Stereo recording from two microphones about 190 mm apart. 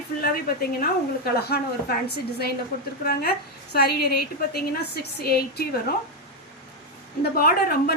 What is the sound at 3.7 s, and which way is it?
A woman's voice, 55° left (ahead or behind).